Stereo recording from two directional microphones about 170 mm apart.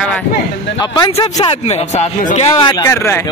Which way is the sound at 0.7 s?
25° left (ahead or behind).